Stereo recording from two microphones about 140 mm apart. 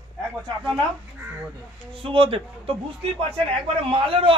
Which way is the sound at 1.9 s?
40° right (ahead or behind).